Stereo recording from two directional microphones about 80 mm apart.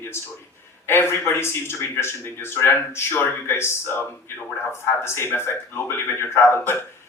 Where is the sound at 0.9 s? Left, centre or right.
Left.